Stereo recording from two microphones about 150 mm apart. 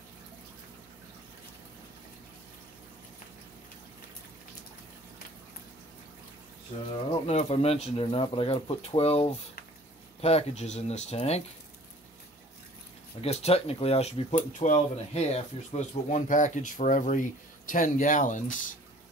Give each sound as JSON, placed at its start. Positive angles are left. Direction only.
{"t": 7.2, "sound": "speech", "side_deg": 45}
{"t": 13.2, "sound": "speech", "side_deg": 45}
{"t": 14.3, "sound": "speech", "side_deg": 55}